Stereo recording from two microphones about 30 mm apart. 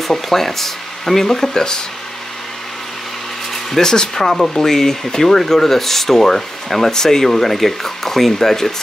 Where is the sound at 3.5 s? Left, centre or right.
Centre.